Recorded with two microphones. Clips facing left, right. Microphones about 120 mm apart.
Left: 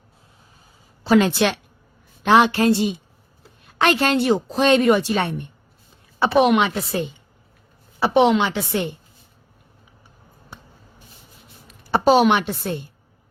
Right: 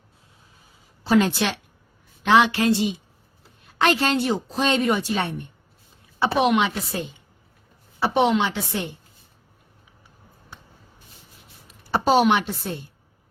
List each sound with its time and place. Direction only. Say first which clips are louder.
1.0 s a woman's voice: left 3 dB; 85° left; by 1.5 s 70° left (ahead or behind)
2.2 s a woman's voice: left 2 dB; 40° left (ahead or behind)
3.8 s a woman's voice: left 2 dB; 60° left (ahead or behind)
6.1 s a woman's voice: left 4 dB; 55° left (ahead or behind)
7.9 s a woman's voice: left 4 dB; 75° left (ahead or behind)
11.9 s a woman's voice: left 3 dB; 75° left (ahead or behind)